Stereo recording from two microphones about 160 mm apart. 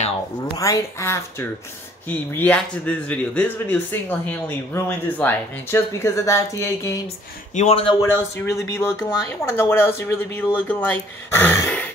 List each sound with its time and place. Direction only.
0.6 s speech: 20° left (ahead or behind)
7.5 s speech: 40° left (ahead or behind)
8.0 s speech: 20° left (ahead or behind)